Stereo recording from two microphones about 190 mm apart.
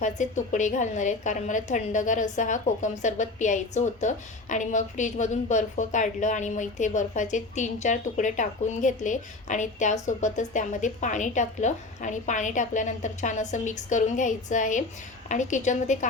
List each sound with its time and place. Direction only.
0.0 s a woman's voice: 40° left (ahead or behind)